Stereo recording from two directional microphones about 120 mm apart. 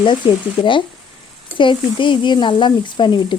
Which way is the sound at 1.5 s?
45° left (ahead or behind).